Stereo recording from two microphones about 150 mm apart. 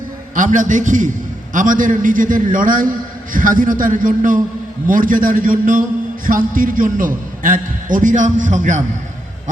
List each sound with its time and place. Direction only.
0.3 s a man's voice: 60° right (ahead or behind)